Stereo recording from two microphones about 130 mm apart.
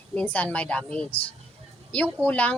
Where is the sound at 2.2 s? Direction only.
10° left (ahead or behind).